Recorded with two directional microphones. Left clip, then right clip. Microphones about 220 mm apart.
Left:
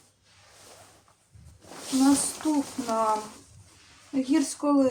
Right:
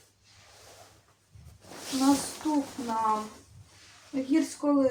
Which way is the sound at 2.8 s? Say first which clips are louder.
Left 4 dB; 30° left (ahead or behind).